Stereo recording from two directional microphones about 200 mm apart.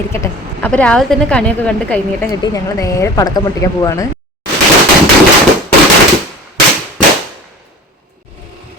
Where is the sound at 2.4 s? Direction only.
15° left (ahead or behind).